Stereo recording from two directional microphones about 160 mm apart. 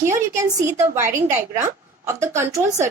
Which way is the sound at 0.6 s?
15° right (ahead or behind).